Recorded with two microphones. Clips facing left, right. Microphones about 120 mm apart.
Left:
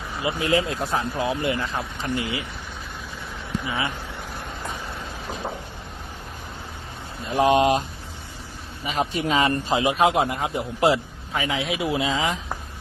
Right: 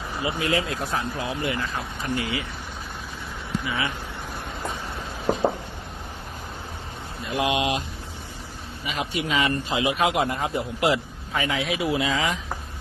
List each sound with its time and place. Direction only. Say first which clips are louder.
0.2 s speech: left 3 dB; 25° left (ahead or behind)
3.7 s speech: left 1 dB; 25° left (ahead or behind)
7.3 s a man's voice: left 6 dB; 40° left (ahead or behind)
8.9 s a man's voice: left 4 dB; 40° left (ahead or behind)
10.2 s a man's voice: even; 15° left (ahead or behind)
10.8 s speech: left 3 dB; 30° left (ahead or behind)
11.3 s speech: even; 15° left (ahead or behind)